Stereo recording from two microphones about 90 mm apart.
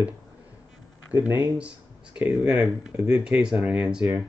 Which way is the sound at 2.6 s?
15° right (ahead or behind).